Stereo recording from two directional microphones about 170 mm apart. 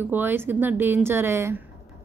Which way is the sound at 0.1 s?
10° right (ahead or behind).